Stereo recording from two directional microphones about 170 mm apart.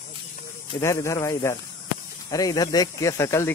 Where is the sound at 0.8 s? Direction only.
15° left (ahead or behind).